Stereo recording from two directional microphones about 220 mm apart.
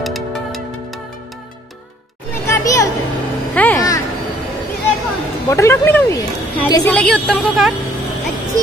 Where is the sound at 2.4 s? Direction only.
15° left (ahead or behind).